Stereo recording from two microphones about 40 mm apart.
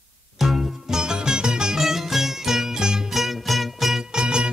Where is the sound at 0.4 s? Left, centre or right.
Centre.